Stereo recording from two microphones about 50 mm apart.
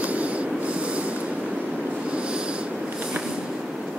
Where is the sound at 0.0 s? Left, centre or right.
Right.